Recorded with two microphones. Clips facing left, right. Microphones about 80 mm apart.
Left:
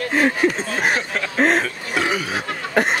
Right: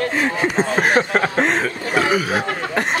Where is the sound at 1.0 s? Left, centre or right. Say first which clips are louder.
Right 6 dB; right.